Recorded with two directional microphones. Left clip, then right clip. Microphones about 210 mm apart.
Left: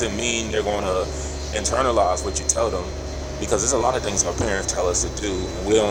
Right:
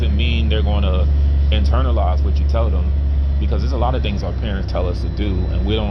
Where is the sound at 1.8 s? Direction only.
20° left (ahead or behind).